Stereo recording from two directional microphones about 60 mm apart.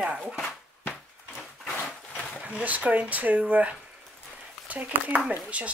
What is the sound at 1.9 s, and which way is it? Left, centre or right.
Dog, centre.